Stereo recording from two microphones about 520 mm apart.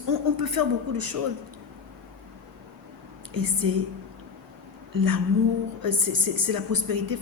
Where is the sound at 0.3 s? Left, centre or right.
Right.